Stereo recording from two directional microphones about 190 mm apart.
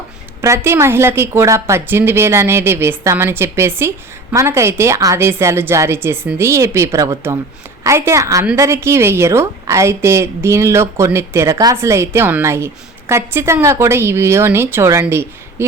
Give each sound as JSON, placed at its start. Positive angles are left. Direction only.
{"t": 0.4, "sound": "a woman's voice", "side_deg": -15}